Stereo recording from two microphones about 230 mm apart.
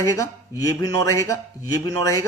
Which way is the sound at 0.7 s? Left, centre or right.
Centre.